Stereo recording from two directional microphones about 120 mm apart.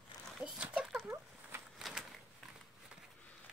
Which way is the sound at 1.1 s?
20° right (ahead or behind).